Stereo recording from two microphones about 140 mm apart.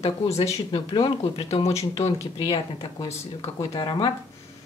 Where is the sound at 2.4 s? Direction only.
35° left (ahead or behind).